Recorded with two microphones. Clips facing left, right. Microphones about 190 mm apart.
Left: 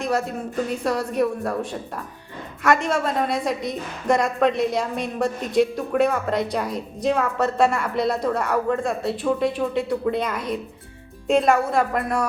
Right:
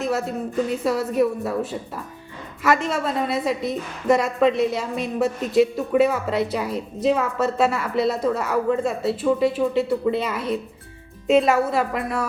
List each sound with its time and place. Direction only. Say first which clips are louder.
0.0 s a woman's voice: even; 5° right (ahead or behind)
2.6 s a woman's voice: left 1 dB; centre (ahead or behind)